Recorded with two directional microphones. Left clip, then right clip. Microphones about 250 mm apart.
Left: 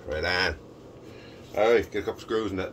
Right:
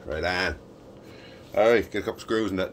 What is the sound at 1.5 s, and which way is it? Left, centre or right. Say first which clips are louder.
Speech: right 2 dB; right.